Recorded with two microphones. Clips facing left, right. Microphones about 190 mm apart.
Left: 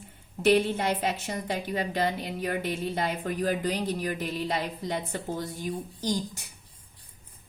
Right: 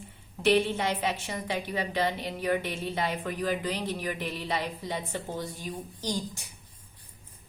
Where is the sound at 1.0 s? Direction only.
40° left (ahead or behind).